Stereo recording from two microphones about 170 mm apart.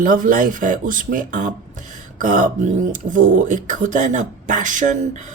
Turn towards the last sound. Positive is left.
turn(degrees=-50)  # may be behind; listen again after turning